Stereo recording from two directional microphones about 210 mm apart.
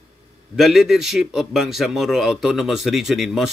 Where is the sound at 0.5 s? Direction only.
Centre (ahead or behind).